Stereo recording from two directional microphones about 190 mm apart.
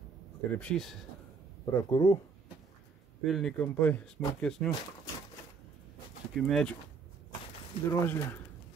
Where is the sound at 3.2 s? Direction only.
Centre (ahead or behind).